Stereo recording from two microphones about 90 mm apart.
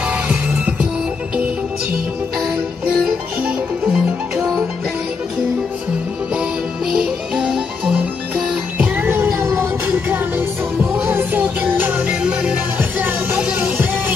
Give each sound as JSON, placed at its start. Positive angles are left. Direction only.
{"t": 0.0, "sound": "music", "side_deg": -15}
{"t": 3.1, "sound": "music", "side_deg": -10}
{"t": 6.9, "sound": "music", "side_deg": -5}
{"t": 8.7, "sound": "music", "side_deg": -25}
{"t": 9.8, "sound": "music", "side_deg": -25}
{"t": 12.1, "sound": "music", "side_deg": -10}
{"t": 12.7, "sound": "music", "side_deg": -25}